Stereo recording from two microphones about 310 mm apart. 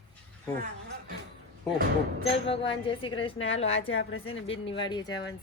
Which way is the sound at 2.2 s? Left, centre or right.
Centre.